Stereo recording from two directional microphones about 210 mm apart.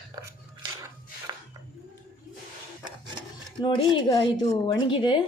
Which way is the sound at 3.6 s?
25° left (ahead or behind).